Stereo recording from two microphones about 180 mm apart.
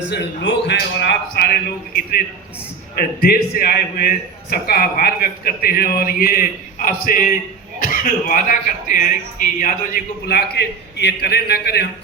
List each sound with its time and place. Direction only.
0.1 s a man's voice: 70° left (ahead or behind)